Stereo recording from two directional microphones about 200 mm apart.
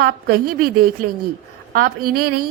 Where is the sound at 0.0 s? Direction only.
50° right (ahead or behind).